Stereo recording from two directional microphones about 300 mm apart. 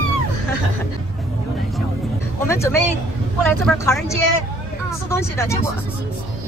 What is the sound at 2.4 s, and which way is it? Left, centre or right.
Speech, centre.